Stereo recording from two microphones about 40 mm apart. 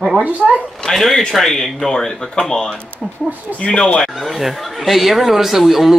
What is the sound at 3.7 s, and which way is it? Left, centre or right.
Speech, left.